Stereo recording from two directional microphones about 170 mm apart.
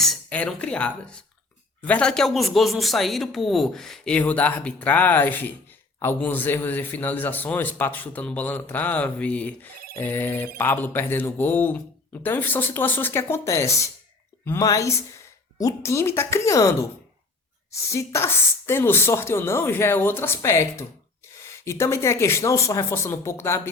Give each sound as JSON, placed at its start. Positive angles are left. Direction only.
{"t": 0.0, "sound": "a man's voice", "side_deg": 5}
{"t": 17.8, "sound": "a man's voice", "side_deg": 15}